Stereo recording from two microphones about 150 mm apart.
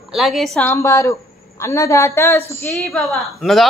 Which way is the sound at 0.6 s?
15° left (ahead or behind).